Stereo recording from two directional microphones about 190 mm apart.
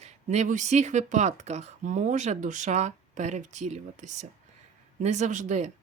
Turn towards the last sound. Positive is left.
turn(degrees=-40)  # may be behind; listen again after turning